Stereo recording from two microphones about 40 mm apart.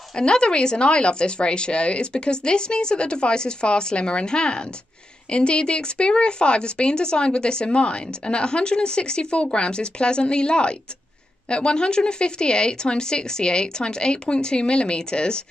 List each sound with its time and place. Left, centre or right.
0.1 s speech: left